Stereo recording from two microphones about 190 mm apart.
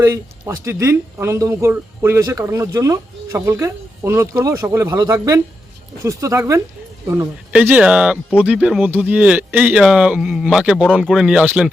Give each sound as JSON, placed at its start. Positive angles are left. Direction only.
{"t": 0.0, "sound": "speech", "side_deg": -15}